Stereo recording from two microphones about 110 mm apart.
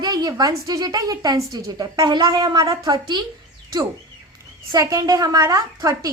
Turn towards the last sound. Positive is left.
turn(degrees=-30)  # may be behind; listen again after turning